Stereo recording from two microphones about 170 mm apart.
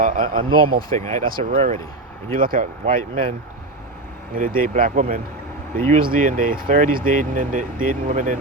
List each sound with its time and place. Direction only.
0.0 s speech: 55° right (ahead or behind)
1.5 s speech: 40° right (ahead or behind)
2.3 s speech: 55° right (ahead or behind)
4.4 s speech: 55° right (ahead or behind)